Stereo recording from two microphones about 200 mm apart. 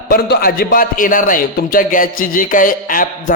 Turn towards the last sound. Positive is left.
turn(degrees=45)  # may be behind; listen again after turning